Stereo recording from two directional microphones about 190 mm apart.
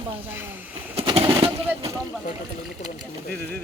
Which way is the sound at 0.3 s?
10° right (ahead or behind).